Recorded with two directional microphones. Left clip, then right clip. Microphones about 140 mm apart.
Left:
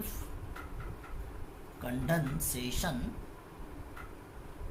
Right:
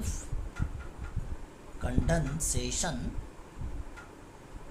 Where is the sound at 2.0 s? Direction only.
30° right (ahead or behind).